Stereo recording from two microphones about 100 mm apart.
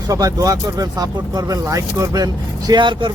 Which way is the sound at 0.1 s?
35° right (ahead or behind).